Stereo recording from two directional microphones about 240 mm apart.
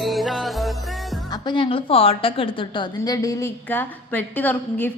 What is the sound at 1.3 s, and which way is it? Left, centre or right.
A woman's voice, centre.